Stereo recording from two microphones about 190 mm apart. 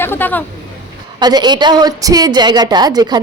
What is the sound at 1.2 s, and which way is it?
A woman's voice, 20° right (ahead or behind).